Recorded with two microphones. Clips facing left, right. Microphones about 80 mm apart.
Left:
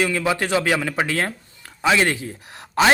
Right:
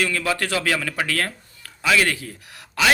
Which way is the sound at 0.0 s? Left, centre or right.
Centre.